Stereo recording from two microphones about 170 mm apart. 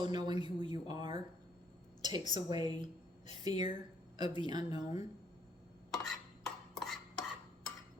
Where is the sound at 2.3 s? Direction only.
25° right (ahead or behind).